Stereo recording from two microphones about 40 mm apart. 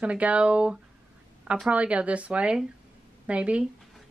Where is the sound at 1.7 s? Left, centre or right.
Right.